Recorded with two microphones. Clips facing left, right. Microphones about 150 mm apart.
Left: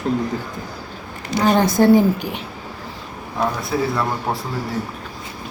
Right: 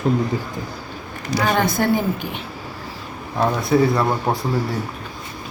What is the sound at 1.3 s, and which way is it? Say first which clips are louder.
Speech: left 3 dB; 35° left (ahead or behind).